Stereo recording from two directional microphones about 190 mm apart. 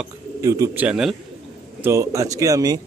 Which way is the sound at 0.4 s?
15° right (ahead or behind).